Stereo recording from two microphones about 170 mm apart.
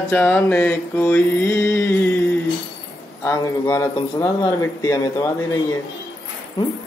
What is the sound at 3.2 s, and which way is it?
Mantra, 15° left (ahead or behind).